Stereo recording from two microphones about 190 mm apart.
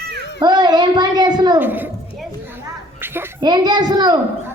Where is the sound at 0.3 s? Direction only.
20° right (ahead or behind).